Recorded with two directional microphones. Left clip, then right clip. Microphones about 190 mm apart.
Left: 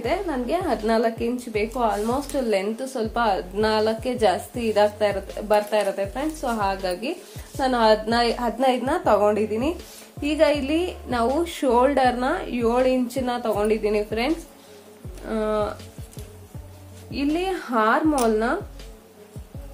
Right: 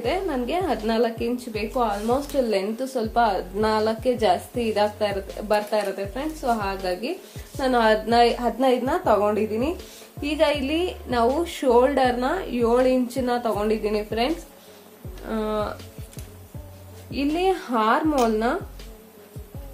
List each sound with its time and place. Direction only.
0.0 s a woman's voice: 10° left (ahead or behind)
17.1 s a woman's voice: centre (ahead or behind)